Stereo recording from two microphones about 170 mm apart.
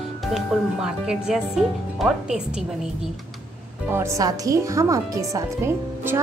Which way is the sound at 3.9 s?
15° right (ahead or behind).